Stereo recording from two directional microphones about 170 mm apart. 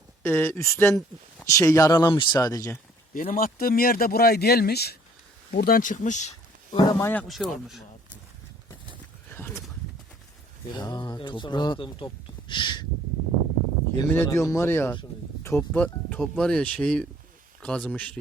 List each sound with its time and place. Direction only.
0.2 s speech: 10° left (ahead or behind)
3.2 s speech: 55° left (ahead or behind)
6.7 s speech: 25° left (ahead or behind)
7.0 s speech: 10° left (ahead or behind)
9.3 s a sound: 15° left (ahead or behind)
10.7 s speech: 25° left (ahead or behind)
14.1 s speech: 15° left (ahead or behind)